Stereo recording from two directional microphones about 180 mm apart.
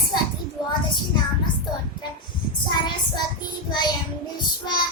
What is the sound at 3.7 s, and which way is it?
Child singing, 25° left (ahead or behind).